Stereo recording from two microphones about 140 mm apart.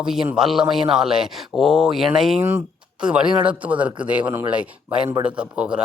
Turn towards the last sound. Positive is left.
turn(degrees=-10)  # may be behind; listen again after turning